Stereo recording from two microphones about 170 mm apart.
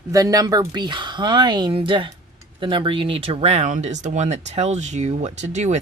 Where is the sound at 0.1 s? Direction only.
20° right (ahead or behind).